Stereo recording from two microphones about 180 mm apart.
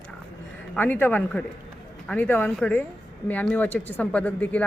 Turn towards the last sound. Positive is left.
turn(degrees=10)  # may be behind; listen again after turning